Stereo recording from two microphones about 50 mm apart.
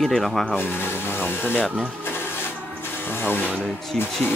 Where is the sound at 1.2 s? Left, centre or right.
Left.